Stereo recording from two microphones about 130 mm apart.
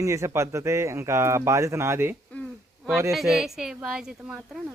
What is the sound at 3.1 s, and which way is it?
Speech, centre (ahead or behind).